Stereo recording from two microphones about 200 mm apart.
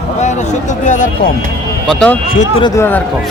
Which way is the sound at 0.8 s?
40° left (ahead or behind).